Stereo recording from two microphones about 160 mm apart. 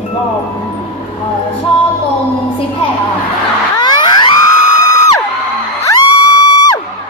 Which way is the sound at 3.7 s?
30° left (ahead or behind).